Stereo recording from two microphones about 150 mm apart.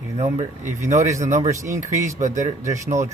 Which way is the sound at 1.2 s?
50° right (ahead or behind).